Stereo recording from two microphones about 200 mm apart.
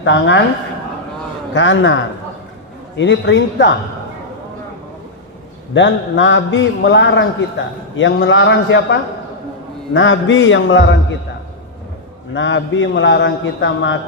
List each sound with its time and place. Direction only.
0.0 s a man's voice: 65° left (ahead or behind)
1.5 s a man's voice: 70° left (ahead or behind)
5.7 s a man's voice: 65° left (ahead or behind)
12.3 s a man's voice: 65° left (ahead or behind)